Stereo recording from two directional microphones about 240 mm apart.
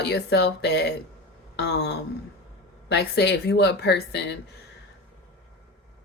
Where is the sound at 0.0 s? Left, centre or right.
Left.